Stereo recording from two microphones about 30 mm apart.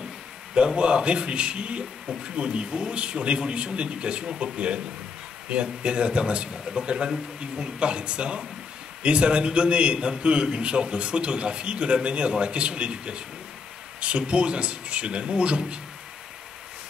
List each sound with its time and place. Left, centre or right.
0.7 s a man's voice: right